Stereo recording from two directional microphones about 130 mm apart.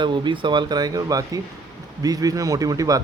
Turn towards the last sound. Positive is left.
turn(degrees=-25)  # may be behind; listen again after turning